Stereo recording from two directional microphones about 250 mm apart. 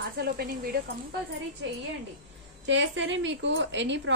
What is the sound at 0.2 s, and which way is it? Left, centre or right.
Speech, right.